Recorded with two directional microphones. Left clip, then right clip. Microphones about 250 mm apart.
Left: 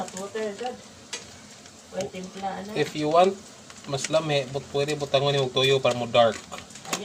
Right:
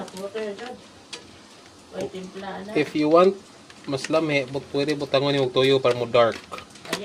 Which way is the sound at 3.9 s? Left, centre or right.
Right.